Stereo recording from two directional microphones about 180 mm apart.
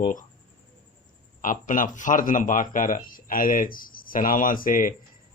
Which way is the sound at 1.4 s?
50° left (ahead or behind).